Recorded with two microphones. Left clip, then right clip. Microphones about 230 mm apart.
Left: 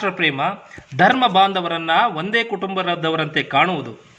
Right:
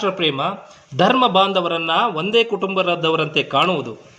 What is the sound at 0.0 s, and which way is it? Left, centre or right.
Speech, left.